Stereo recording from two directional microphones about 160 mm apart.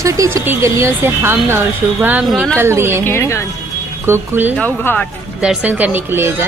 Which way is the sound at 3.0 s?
15° left (ahead or behind).